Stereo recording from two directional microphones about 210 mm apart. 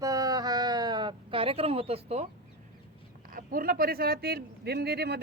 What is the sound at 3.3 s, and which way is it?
Speech, 45° right (ahead or behind).